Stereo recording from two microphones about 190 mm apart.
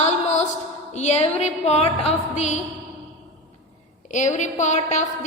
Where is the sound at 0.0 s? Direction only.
35° left (ahead or behind).